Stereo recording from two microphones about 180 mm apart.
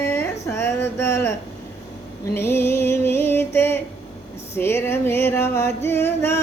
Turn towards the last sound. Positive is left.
turn(degrees=15)  # may be behind; listen again after turning